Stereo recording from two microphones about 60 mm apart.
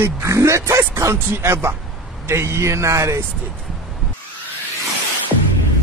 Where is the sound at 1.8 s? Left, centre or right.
Centre.